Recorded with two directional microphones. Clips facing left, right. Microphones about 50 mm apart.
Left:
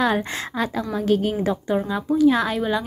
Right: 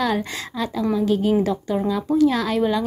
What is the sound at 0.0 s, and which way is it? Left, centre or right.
A woman's voice, left.